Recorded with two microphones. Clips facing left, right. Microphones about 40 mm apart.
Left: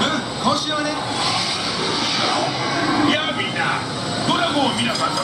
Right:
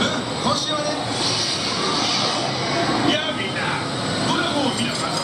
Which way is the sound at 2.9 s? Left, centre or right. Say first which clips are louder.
Left 4 dB; centre.